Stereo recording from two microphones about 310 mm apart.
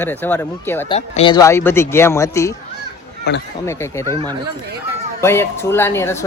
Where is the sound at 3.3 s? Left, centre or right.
Left.